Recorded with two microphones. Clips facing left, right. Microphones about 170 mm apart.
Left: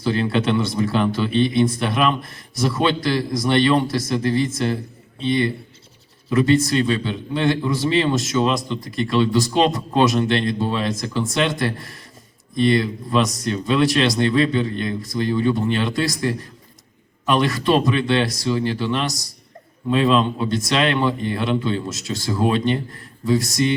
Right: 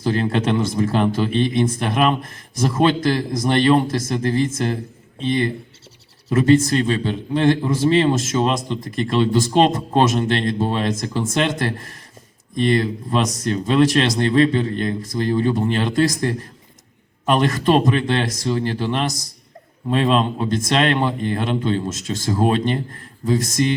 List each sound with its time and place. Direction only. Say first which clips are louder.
0.0 s a man's voice: even; 45° right (ahead or behind)
6.4 s a man's voice: right 2 dB; 45° right (ahead or behind)